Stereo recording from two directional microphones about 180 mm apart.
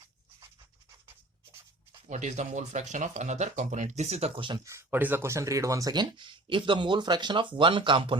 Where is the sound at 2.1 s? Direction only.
40° right (ahead or behind).